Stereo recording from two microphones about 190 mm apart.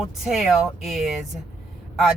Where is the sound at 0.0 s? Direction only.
Centre (ahead or behind).